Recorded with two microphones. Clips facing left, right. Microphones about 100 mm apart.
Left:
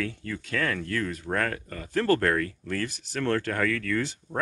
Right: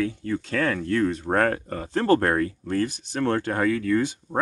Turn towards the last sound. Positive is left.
turn(degrees=-25)  # may be behind; listen again after turning